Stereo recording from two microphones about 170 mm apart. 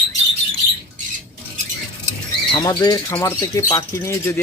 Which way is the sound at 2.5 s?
25° left (ahead or behind).